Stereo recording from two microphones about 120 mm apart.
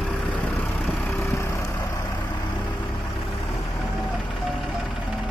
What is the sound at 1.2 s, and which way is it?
Vehicle, 25° left (ahead or behind).